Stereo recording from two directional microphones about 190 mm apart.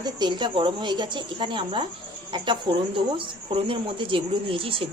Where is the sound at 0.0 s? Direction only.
25° right (ahead or behind).